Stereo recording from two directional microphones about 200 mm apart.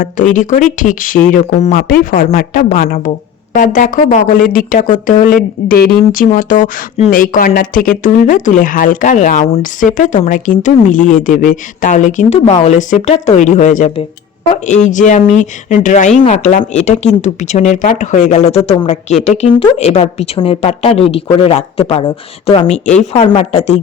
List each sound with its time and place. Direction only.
0.3 s speech: 40° left (ahead or behind)